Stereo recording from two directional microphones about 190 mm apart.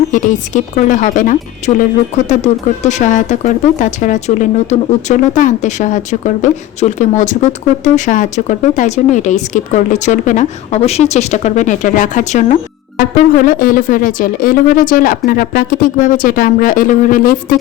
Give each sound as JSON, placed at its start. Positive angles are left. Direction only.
{"t": 0.1, "sound": "speech", "side_deg": 40}